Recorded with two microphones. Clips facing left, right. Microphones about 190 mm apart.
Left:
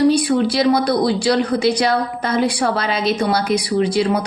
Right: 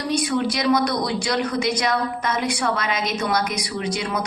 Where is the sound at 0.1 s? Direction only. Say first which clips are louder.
Left 6 dB; 30° left (ahead or behind).